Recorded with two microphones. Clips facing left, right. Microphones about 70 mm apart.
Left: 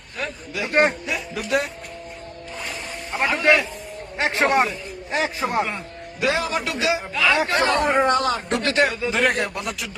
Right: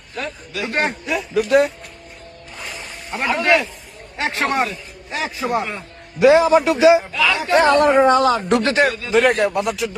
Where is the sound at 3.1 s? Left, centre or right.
Centre.